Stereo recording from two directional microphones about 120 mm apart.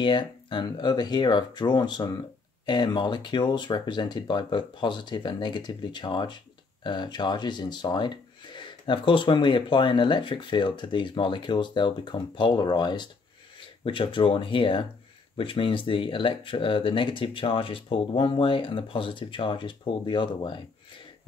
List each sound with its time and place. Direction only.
0.0 s speech: 40° left (ahead or behind)